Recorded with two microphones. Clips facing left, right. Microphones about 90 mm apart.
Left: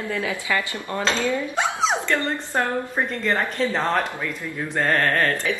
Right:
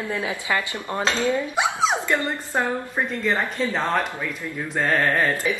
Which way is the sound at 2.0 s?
10° right (ahead or behind).